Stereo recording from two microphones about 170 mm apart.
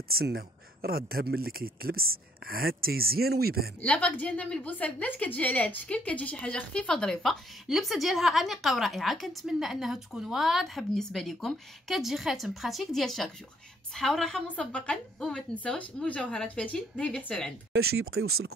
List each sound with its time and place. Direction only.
0.1 s speech: 65° right (ahead or behind)
3.8 s a woman's voice: 5° left (ahead or behind)